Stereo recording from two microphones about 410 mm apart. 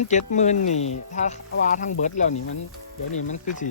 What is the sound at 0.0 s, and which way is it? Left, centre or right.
Speech, centre.